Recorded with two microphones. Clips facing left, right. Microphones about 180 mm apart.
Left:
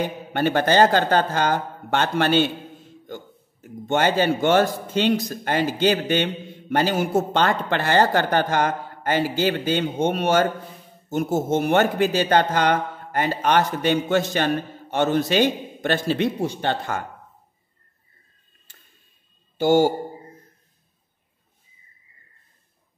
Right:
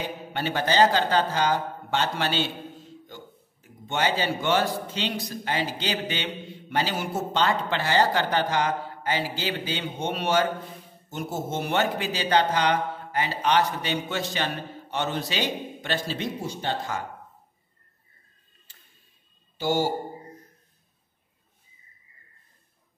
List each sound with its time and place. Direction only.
0.3 s a man's voice: 55° left (ahead or behind)
3.6 s a man's voice: 50° left (ahead or behind)
19.6 s a man's voice: 50° left (ahead or behind)